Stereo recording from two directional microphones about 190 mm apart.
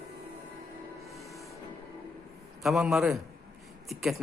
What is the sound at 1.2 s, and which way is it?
Train, centre (ahead or behind).